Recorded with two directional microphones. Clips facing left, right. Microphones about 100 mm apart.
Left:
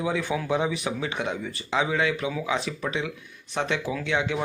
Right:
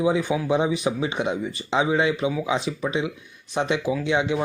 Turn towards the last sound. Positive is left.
turn(degrees=-20)  # may be behind; listen again after turning